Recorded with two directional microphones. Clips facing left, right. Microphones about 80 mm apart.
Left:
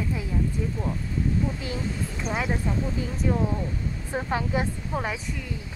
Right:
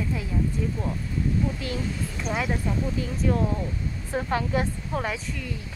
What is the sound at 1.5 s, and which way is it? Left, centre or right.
Speech, left.